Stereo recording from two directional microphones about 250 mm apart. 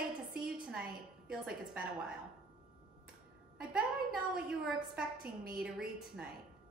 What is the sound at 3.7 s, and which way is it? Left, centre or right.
A woman's voice, centre.